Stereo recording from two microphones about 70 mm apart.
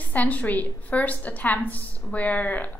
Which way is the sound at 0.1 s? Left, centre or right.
Left.